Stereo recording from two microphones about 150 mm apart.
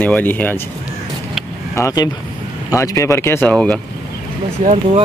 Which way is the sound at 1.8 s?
25° left (ahead or behind).